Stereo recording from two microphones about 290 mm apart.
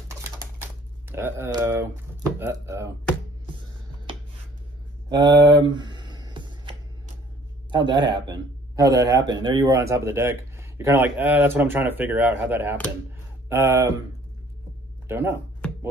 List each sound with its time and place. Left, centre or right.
0.2 s typewriter: centre
2.3 s a man's voice: centre
4.1 s a sound: centre
7.7 s a man's voice: centre
15.0 s speech: centre